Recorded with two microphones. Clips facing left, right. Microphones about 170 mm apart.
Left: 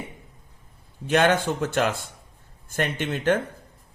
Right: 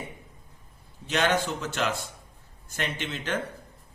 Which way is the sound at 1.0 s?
55° left (ahead or behind).